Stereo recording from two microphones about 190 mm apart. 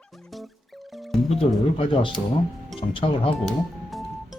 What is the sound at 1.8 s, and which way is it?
Speech, 25° left (ahead or behind).